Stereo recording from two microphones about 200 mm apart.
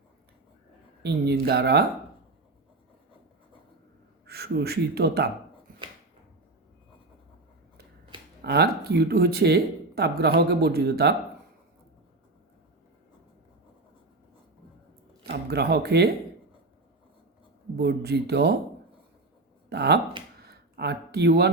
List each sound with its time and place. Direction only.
1.0 s speech: 55° right (ahead or behind)
4.3 s speech: 50° right (ahead or behind)
8.4 s speech: 50° right (ahead or behind)
15.3 s speech: 55° right (ahead or behind)
17.7 s speech: 55° right (ahead or behind)
19.7 s speech: 55° right (ahead or behind)
20.5 s a sound: 55° right (ahead or behind)